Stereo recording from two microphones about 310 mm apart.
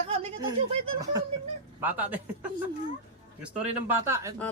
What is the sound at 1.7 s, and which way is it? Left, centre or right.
Speech, centre.